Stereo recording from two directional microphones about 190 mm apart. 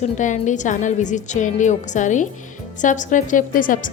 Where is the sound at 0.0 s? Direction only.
40° left (ahead or behind).